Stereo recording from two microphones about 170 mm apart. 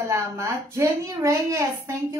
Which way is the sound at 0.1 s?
15° right (ahead or behind).